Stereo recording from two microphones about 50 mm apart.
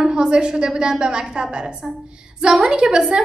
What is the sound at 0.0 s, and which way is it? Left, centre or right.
A woman's voice, centre.